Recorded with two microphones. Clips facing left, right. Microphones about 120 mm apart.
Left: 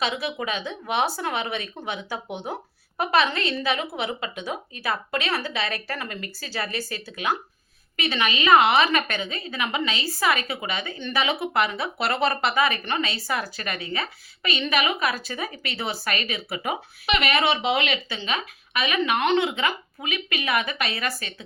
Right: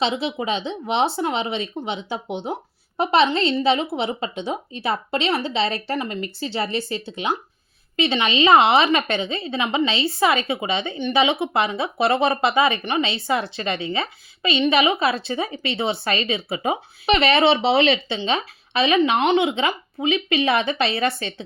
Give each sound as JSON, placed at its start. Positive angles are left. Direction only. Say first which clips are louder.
{"t": 0.0, "sound": "a woman's voice", "louder": "right 4 dB", "side_deg": -25}